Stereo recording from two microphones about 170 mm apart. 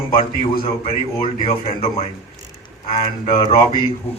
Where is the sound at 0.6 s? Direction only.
30° left (ahead or behind).